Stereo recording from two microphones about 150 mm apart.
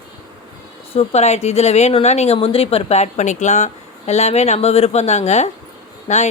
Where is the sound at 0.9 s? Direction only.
45° left (ahead or behind).